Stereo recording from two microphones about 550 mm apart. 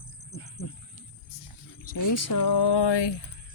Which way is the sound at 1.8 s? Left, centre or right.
Left.